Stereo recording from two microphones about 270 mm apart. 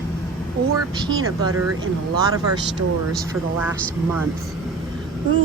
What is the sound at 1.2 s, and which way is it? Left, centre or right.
Speech, right.